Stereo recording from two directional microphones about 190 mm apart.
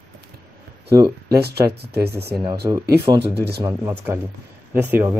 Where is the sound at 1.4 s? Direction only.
55° right (ahead or behind).